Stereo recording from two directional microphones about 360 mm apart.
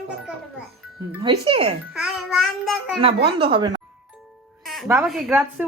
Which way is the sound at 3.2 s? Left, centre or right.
Centre.